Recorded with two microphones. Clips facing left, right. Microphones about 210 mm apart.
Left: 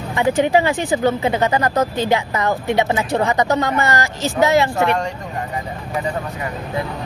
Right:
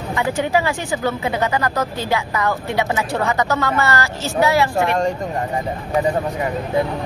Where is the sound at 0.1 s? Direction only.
20° left (ahead or behind).